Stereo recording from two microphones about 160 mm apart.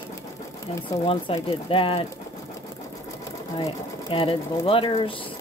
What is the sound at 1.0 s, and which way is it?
Speech, 35° left (ahead or behind).